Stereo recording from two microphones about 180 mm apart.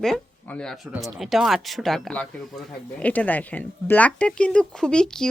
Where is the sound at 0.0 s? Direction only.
5° left (ahead or behind).